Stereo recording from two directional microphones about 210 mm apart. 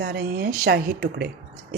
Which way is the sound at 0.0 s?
50° right (ahead or behind).